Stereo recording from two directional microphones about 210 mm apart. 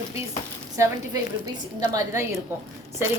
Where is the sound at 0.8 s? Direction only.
20° right (ahead or behind).